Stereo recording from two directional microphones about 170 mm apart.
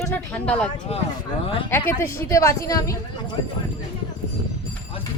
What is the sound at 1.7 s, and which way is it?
A woman's voice, 15° left (ahead or behind).